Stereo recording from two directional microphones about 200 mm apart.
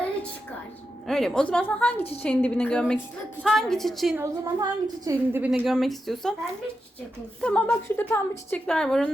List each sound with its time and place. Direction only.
1.0 s a woman's voice: centre (ahead or behind)
4.2 s a woman's voice: 15° right (ahead or behind); by 6.3 s centre (ahead or behind)
7.4 s a woman's voice: 5° left (ahead or behind)